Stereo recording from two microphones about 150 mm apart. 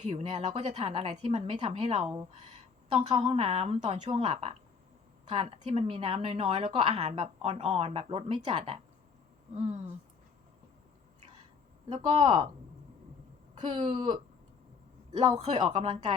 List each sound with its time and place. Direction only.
0.2 s speech: 35° right (ahead or behind)
3.9 s a woman's voice: 55° right (ahead or behind)
4.2 s a woman's voice: 40° right (ahead or behind)
11.9 s speech: 35° right (ahead or behind)
13.7 s speech: 40° right (ahead or behind)